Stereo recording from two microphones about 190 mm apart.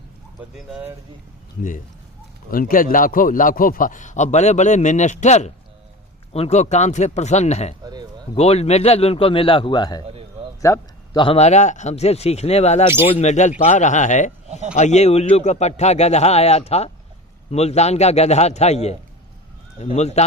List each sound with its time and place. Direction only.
0.6 s speech: 5° right (ahead or behind)
2.5 s speech: 45° left (ahead or behind)
7.8 s a sound: 20° right (ahead or behind)
8.4 s a man's voice: 35° left (ahead or behind)
10.6 s a sound: 15° left (ahead or behind)
11.2 s speech: 35° left (ahead or behind)